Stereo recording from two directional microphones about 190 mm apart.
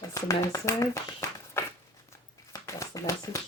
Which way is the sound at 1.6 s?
10° left (ahead or behind).